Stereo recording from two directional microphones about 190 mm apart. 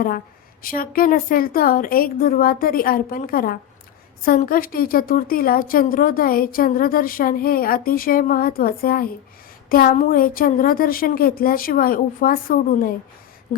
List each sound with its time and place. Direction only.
0.6 s a woman's voice: 50° left (ahead or behind)